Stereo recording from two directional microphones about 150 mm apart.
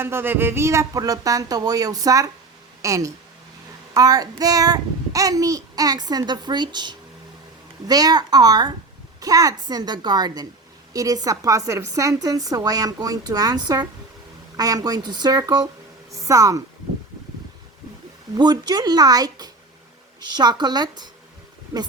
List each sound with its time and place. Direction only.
0.0 s child singing: 15° right (ahead or behind)
16.1 s a woman's voice: 20° right (ahead or behind)
18.3 s child singing: 25° right (ahead or behind)